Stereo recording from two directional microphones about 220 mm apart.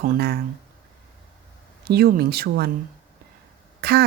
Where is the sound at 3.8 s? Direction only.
45° right (ahead or behind).